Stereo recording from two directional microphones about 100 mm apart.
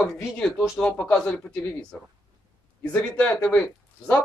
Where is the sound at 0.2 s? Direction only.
5° left (ahead or behind).